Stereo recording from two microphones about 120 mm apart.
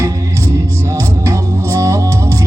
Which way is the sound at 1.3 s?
25° right (ahead or behind).